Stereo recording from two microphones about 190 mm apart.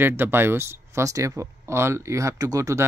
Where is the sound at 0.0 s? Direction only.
10° right (ahead or behind).